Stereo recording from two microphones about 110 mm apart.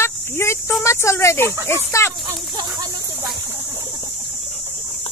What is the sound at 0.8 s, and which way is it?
Speech, 25° left (ahead or behind).